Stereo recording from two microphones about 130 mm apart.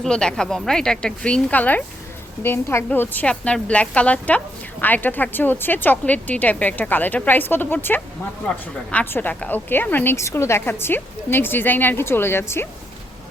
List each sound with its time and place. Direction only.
0.0 s a woman's voice: 5° left (ahead or behind)